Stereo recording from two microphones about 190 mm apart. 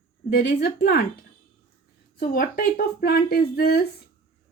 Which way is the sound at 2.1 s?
45° left (ahead or behind).